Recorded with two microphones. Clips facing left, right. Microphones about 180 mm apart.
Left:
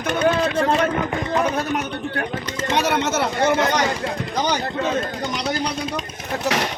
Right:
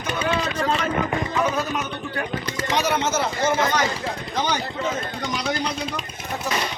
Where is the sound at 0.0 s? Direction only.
60° left (ahead or behind).